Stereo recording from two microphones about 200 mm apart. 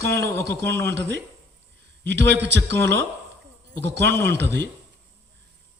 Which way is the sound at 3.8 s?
60° right (ahead or behind).